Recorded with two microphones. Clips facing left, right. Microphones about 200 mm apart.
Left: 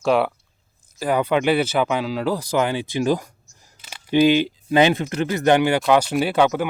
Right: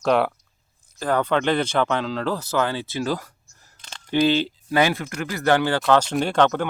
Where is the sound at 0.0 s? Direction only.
Centre (ahead or behind).